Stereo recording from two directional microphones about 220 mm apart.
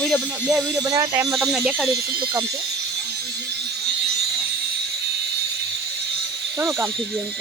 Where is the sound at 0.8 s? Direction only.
15° right (ahead or behind).